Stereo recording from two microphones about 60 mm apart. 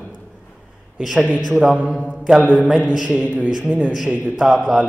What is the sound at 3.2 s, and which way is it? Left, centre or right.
Speech, right.